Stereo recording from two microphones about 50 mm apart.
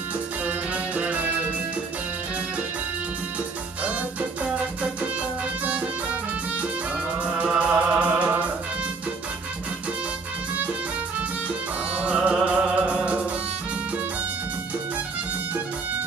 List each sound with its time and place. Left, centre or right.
0.4 s music: right
3.8 s music: right
7.2 s music: right
11.4 s music: right